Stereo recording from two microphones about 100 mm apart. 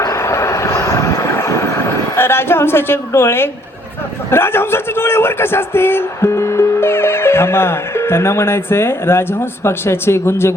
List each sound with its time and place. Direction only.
0.0 s vehicle: 30° left (ahead or behind)
4.3 s a man's voice: 25° left (ahead or behind)